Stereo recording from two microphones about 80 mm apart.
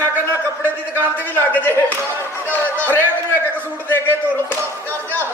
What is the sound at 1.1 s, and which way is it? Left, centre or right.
A man's voice, left.